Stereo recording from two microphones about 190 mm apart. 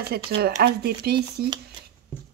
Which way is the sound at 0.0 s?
55° right (ahead or behind).